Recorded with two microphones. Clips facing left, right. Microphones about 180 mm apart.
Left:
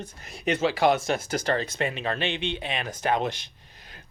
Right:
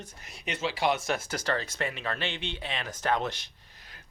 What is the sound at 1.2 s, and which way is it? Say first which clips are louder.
Speech: left 5 dB; 20° left (ahead or behind).